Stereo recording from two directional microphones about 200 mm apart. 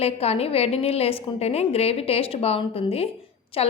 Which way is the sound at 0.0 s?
30° left (ahead or behind).